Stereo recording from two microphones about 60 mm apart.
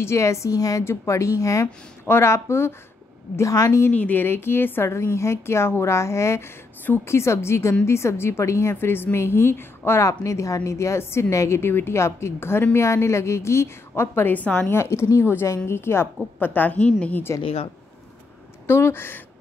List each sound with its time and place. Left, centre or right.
0.0 s a woman's voice: left
0.8 s a woman's voice: left
2.0 s a woman's voice: left
3.3 s a woman's voice: left
3.9 s speech: left
4.8 s a woman's voice: left
10.0 s a woman's voice: left
14.3 s a woman's voice: left
14.7 s a woman's voice: left
16.3 s a woman's voice: left
17.3 s a woman's voice: left
18.7 s speech: left